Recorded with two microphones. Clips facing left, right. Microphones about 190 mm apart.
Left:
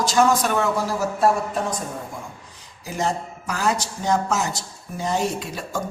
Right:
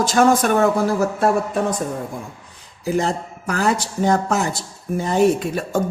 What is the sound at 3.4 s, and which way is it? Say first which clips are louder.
Speech: right 4 dB; 55° right (ahead or behind).